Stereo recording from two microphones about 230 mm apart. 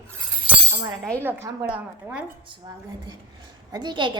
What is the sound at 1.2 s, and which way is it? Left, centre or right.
Speech, centre.